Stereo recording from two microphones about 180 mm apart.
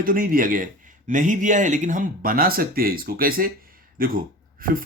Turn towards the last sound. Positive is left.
turn(degrees=-50)  # may be behind; listen again after turning